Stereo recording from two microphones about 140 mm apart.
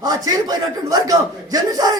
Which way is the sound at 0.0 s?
25° right (ahead or behind).